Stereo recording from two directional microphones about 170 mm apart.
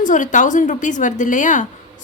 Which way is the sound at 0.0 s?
50° left (ahead or behind).